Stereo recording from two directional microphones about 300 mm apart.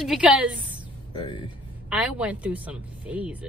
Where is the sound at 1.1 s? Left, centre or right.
Centre.